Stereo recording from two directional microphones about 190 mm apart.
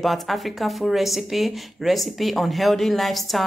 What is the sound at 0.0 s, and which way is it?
Speech, centre (ahead or behind).